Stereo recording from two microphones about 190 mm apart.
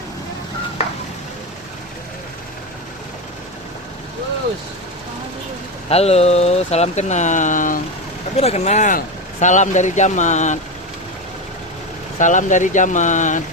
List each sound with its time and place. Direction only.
5.9 s speech: 35° left (ahead or behind)
12.2 s speech: 40° left (ahead or behind)